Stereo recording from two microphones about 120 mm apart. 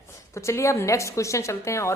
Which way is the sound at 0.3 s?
25° left (ahead or behind).